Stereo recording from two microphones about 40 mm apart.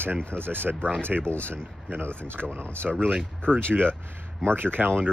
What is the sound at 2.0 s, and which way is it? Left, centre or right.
Speech, right.